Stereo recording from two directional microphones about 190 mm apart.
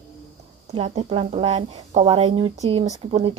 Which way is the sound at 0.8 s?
35° right (ahead or behind).